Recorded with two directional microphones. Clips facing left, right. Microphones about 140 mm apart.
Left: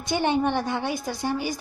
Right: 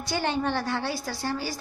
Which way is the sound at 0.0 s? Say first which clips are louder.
Left 4 dB; 20° left (ahead or behind).